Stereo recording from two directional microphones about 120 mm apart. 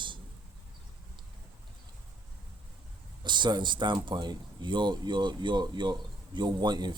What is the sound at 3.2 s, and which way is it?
Speech, 40° right (ahead or behind).